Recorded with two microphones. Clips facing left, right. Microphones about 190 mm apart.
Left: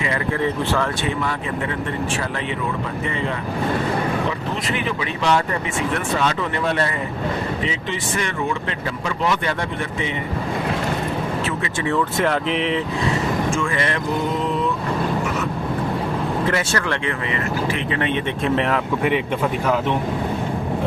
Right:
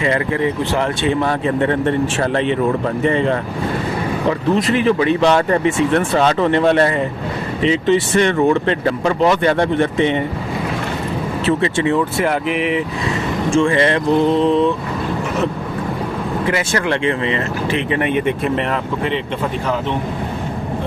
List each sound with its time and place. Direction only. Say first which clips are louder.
0.4 s speech: right 3 dB; 15° right (ahead or behind)
1.0 s speech: right 7 dB; 35° right (ahead or behind)
4.7 s speech: right 10 dB; 35° right (ahead or behind)
8.2 s speech: right 10 dB; 35° right (ahead or behind)
11.4 s speech: right 8 dB; 25° right (ahead or behind)
12.1 s speech: right 2 dB; 10° right (ahead or behind)
13.6 s speech: right 8 dB; 25° right (ahead or behind)
16.5 s speech: right 4 dB; 15° right (ahead or behind)